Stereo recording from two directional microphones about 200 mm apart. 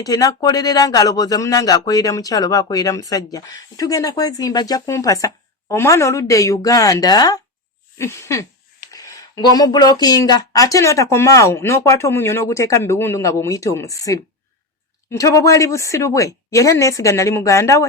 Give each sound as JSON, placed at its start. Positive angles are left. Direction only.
{"t": 0.0, "sound": "speech", "side_deg": 15}